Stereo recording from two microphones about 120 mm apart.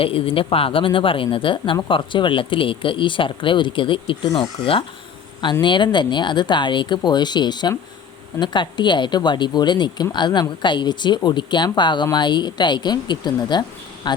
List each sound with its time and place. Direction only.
0.0 s speech: 50° left (ahead or behind)